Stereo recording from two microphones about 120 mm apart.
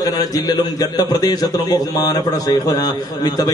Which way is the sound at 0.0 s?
30° left (ahead or behind).